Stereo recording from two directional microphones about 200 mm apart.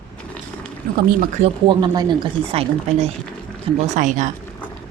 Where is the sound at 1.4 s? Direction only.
25° right (ahead or behind).